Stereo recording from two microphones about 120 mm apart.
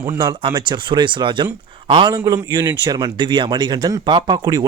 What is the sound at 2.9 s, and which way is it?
Speech, 30° right (ahead or behind).